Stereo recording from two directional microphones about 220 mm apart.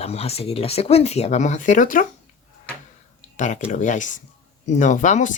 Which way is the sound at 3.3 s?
35° left (ahead or behind).